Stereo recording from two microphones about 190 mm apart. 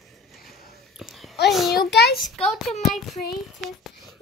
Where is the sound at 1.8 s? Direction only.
60° left (ahead or behind).